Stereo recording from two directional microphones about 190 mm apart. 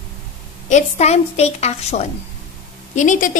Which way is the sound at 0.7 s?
35° left (ahead or behind).